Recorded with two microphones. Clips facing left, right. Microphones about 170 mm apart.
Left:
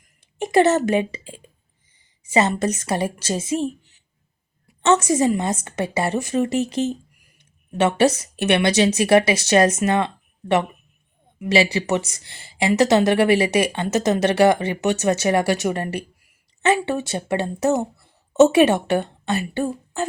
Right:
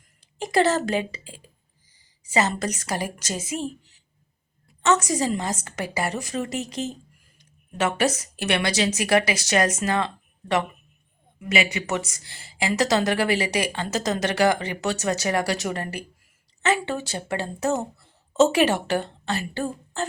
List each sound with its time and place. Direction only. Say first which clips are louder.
0.3 s a woman's voice: left 5 dB; 25° left (ahead or behind)
11.4 s a woman's voice: left 6 dB; 30° left (ahead or behind); by 20.1 s 15° left (ahead or behind)